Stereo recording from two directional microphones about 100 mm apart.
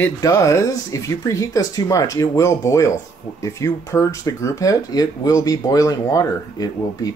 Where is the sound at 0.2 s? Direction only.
30° left (ahead or behind).